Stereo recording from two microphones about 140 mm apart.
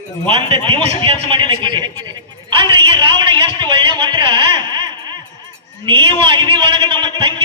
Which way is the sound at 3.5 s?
30° right (ahead or behind).